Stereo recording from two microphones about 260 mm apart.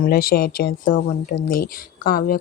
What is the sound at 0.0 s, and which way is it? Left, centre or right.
Speech, left.